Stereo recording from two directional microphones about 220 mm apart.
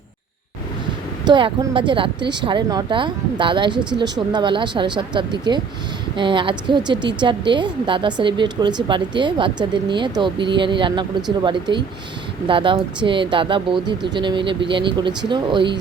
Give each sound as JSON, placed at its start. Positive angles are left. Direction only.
{"t": 1.2, "sound": "speech", "side_deg": -20}